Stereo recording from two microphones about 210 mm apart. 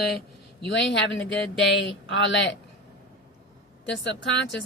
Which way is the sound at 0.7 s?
60° left (ahead or behind).